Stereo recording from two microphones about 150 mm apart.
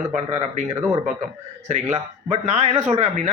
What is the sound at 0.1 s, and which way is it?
A man's voice, 50° right (ahead or behind).